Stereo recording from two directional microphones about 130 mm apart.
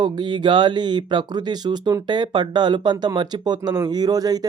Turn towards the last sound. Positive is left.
turn(degrees=-30)  # may be behind; listen again after turning